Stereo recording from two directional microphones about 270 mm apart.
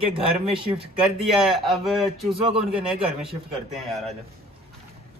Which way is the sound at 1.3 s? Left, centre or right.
Centre.